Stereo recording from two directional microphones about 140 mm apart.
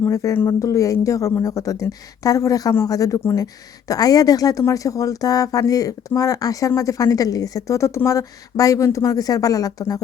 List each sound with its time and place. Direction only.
0.0 s speech: 20° left (ahead or behind)